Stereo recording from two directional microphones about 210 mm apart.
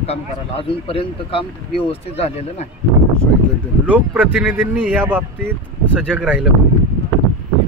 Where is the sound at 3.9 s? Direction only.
5° right (ahead or behind).